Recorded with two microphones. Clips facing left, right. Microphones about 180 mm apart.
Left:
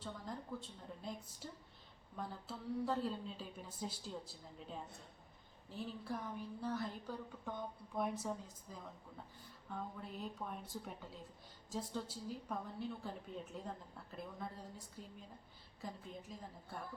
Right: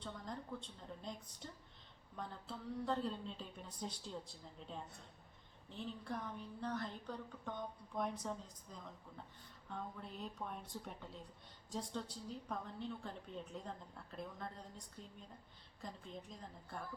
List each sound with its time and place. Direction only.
0.0 s a woman's voice: 5° left (ahead or behind)